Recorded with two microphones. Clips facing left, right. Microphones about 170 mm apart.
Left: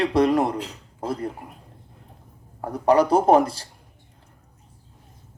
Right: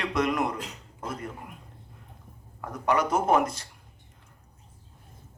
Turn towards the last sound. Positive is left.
turn(degrees=30)  # may be behind; listen again after turning